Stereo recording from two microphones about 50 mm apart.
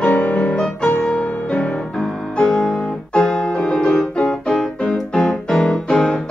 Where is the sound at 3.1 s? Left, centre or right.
Centre.